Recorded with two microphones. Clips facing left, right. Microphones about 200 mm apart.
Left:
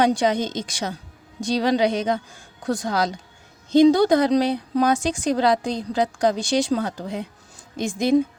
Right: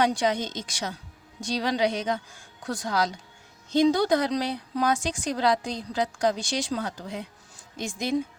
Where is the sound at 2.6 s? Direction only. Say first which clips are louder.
Left 8 dB; 50° left (ahead or behind).